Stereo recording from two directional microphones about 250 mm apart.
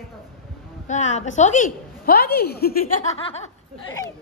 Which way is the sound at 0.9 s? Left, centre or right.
Left.